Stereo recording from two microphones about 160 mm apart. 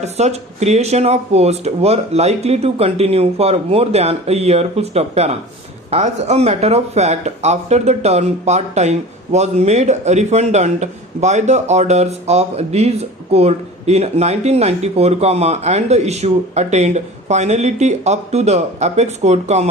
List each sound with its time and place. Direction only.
0.0 s speech: 45° right (ahead or behind)